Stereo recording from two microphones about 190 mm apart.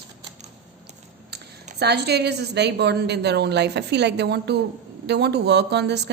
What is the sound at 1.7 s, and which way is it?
A woman's voice, 60° right (ahead or behind).